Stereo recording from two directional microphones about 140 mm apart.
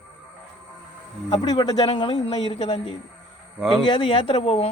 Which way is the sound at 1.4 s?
30° left (ahead or behind).